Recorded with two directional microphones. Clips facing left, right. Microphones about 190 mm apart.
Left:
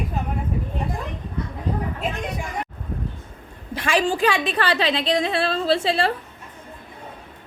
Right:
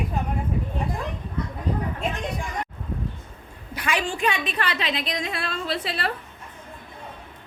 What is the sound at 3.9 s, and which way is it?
A woman's voice, 35° left (ahead or behind).